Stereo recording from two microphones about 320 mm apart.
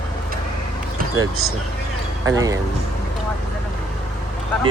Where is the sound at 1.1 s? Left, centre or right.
Right.